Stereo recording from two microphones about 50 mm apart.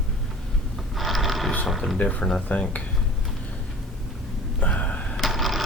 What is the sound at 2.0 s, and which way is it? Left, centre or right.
Speech, left.